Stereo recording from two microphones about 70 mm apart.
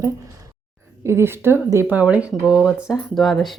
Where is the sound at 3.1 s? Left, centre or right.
Centre.